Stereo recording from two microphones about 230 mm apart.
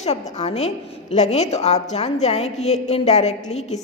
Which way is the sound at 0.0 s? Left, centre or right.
Left.